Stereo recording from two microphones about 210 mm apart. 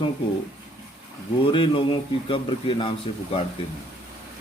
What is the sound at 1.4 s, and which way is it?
A man's voice, 25° left (ahead or behind).